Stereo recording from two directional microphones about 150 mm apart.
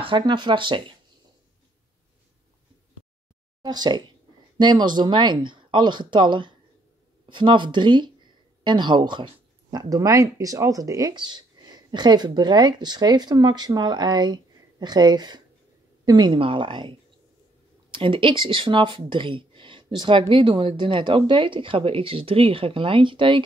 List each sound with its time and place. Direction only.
0.0 s speech: 30° right (ahead or behind)
3.6 s speech: 30° right (ahead or behind)
17.9 s speech: 35° right (ahead or behind)